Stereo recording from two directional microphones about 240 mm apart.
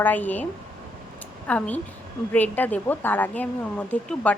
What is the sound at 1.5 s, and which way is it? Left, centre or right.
A woman's voice, centre.